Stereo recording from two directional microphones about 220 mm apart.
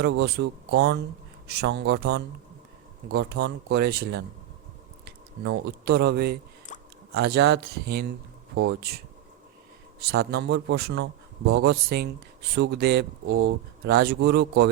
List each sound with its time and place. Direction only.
0.0 s speech: 50° right (ahead or behind)
6.7 s a sound: 35° left (ahead or behind)
7.1 s speech: 45° right (ahead or behind)